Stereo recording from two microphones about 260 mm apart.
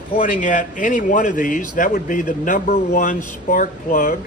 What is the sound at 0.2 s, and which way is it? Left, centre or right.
A man's voice, left.